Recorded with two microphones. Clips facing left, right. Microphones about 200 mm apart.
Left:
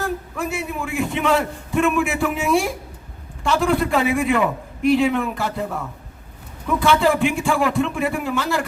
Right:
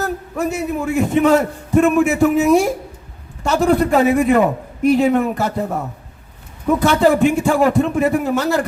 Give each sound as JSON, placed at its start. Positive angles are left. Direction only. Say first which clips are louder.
{"t": 0.0, "sound": "a man's voice", "louder": "right 4 dB", "side_deg": -40}